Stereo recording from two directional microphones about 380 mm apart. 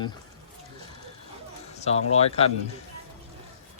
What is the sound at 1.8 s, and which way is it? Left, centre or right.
Speech, centre.